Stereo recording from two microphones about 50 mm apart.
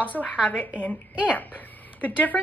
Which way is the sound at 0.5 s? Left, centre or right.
Left.